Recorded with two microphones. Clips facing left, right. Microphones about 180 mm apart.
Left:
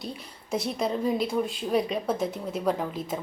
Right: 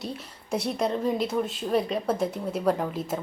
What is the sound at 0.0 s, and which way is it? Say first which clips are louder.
A woman's voice: right 2 dB; 5° right (ahead or behind).